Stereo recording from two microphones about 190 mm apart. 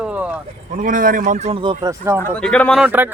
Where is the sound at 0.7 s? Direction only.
45° right (ahead or behind); by 1.8 s 30° right (ahead or behind).